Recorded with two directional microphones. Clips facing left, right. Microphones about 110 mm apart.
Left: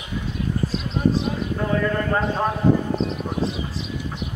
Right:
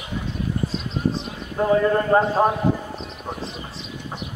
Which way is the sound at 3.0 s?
40° left (ahead or behind).